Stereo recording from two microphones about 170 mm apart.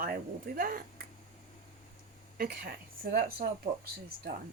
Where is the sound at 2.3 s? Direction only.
60° right (ahead or behind).